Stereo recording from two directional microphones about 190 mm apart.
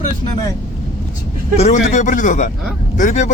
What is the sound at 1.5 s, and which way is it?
A man's voice, 35° left (ahead or behind).